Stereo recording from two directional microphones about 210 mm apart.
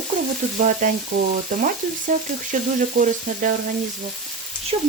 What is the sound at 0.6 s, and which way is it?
Frying, 40° right (ahead or behind).